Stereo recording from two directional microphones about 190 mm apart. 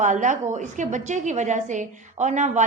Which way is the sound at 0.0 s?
40° right (ahead or behind).